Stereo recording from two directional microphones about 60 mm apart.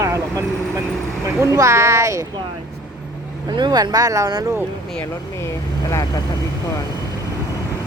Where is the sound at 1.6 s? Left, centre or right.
Right.